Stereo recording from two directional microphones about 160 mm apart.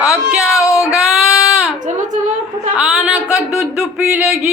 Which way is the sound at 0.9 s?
Centre (ahead or behind).